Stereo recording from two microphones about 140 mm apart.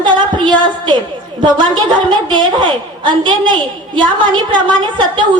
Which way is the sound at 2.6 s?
35° right (ahead or behind).